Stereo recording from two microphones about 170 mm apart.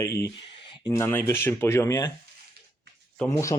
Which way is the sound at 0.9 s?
15° left (ahead or behind).